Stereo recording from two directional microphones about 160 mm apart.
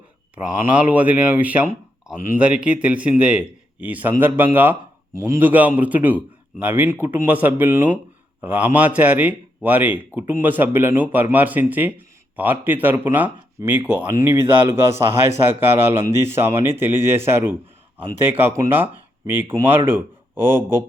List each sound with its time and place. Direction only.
0.3 s a man's voice: 10° right (ahead or behind)